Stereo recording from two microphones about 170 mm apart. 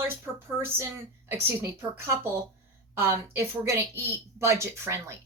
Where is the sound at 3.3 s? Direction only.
15° right (ahead or behind).